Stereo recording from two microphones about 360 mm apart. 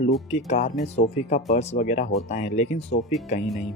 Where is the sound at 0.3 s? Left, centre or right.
Centre.